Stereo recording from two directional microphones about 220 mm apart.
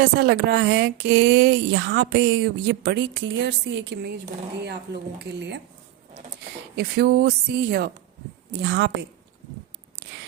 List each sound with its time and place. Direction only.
0.0 s speech: 45° right (ahead or behind)
6.7 s speech: 45° right (ahead or behind)